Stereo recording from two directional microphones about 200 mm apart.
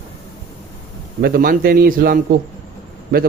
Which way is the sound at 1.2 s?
45° right (ahead or behind).